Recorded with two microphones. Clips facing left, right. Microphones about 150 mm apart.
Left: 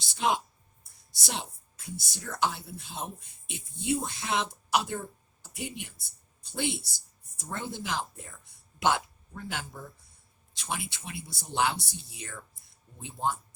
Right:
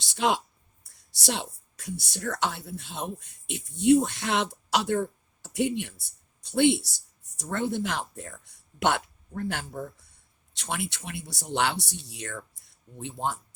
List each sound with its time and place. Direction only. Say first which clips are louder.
0.0 s a woman's voice: right 3 dB; 75° right (ahead or behind)